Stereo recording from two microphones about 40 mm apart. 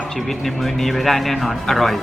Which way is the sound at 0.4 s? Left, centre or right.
Centre.